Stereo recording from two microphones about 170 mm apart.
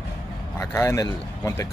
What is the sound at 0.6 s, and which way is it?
Speech, 15° left (ahead or behind).